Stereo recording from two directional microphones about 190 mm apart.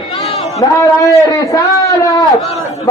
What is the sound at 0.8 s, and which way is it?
A man's voice, 20° left (ahead or behind).